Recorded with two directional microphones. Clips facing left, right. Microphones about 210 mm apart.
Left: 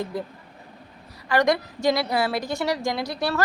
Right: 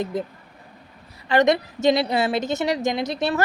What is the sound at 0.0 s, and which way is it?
Speech, 20° right (ahead or behind).